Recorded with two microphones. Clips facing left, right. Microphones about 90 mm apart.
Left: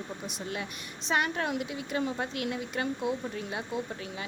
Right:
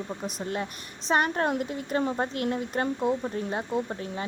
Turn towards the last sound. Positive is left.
turn(degrees=-40)  # may be behind; listen again after turning